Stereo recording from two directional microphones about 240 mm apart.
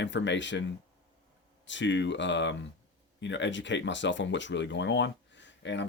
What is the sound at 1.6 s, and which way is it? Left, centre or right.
Speech, left.